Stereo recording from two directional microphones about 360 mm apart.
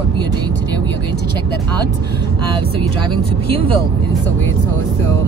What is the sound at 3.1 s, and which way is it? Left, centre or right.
Speech, centre.